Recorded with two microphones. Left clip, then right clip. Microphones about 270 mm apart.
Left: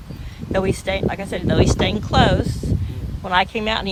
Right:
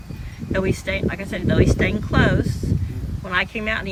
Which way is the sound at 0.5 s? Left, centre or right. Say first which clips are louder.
Left 2 dB; centre.